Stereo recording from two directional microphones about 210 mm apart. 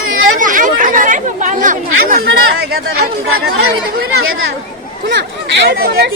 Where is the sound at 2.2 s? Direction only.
50° right (ahead or behind).